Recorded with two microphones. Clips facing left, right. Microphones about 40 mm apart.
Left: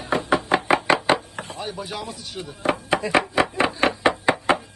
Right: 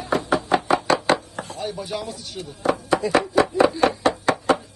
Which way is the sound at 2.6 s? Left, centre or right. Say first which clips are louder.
Right 2 dB; left.